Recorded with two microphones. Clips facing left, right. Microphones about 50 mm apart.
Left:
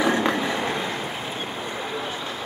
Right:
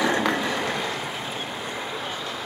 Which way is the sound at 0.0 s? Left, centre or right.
Left.